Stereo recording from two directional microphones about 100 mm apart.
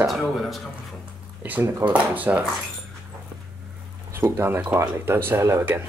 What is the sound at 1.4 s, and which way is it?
Speech, 15° right (ahead or behind).